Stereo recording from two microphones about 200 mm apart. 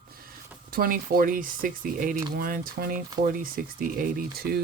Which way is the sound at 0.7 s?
45° right (ahead or behind).